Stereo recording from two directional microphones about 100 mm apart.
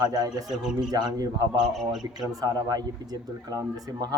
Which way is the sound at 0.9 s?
45° right (ahead or behind).